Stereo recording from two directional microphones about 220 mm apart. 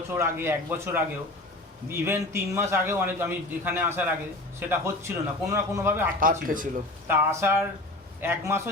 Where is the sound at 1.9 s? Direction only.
10° right (ahead or behind).